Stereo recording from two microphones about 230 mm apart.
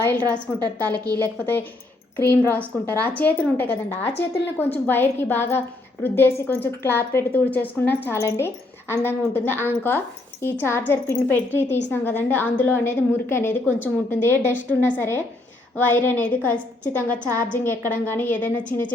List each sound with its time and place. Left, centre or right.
0.3 s a woman's voice: centre
2.1 s a woman's voice: centre